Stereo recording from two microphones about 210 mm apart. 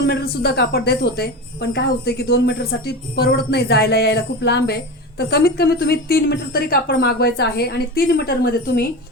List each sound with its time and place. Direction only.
0.1 s a woman's voice: 50° left (ahead or behind)